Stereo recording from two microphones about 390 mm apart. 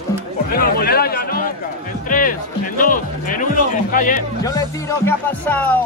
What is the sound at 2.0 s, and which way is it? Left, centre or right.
Music, left.